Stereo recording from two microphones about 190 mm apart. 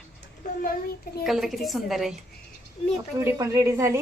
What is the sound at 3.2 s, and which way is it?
Speech, 15° right (ahead or behind).